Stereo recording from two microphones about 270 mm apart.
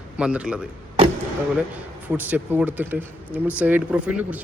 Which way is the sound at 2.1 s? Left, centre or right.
Centre.